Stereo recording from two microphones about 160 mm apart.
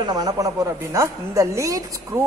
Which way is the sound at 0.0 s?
25° right (ahead or behind).